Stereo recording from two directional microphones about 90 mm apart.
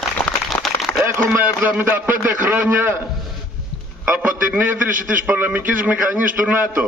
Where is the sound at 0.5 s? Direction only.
Centre (ahead or behind).